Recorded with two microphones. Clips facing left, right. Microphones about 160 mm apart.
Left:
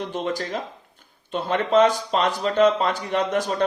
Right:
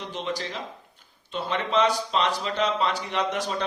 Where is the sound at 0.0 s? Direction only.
50° left (ahead or behind).